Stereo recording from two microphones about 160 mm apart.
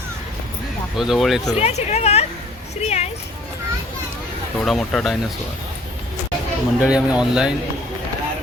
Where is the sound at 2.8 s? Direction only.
40° left (ahead or behind).